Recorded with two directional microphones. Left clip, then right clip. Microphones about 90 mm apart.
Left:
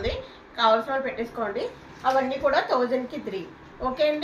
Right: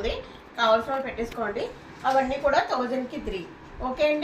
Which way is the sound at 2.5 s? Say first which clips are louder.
Left 1 dB; 20° left (ahead or behind).